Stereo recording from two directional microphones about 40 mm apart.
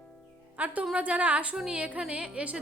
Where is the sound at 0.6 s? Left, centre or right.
Right.